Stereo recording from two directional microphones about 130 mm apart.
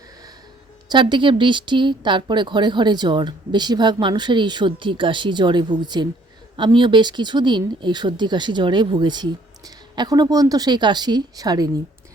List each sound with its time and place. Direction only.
0.9 s speech: 35° right (ahead or behind)